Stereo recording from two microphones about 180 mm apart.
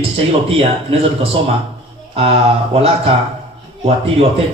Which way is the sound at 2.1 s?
35° right (ahead or behind).